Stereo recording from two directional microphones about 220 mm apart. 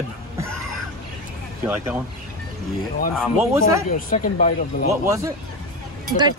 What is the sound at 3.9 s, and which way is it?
Speech, 35° left (ahead or behind).